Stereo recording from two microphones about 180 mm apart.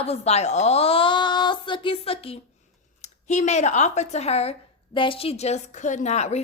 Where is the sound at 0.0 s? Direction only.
35° left (ahead or behind).